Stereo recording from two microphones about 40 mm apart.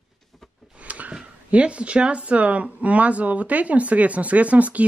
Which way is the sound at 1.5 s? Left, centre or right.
Right.